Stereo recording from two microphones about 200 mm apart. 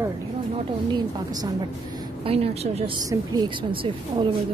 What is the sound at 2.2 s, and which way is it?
Speech, 30° right (ahead or behind).